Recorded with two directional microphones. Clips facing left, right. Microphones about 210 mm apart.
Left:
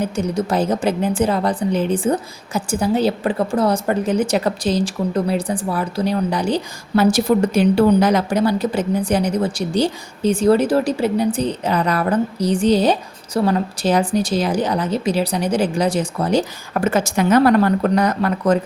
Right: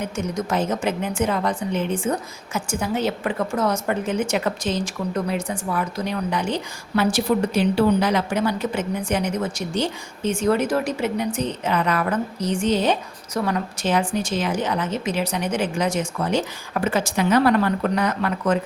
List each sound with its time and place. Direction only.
0.0 s a woman's voice: 35° left (ahead or behind)